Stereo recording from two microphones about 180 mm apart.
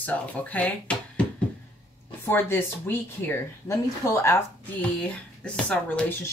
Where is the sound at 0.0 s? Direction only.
10° left (ahead or behind).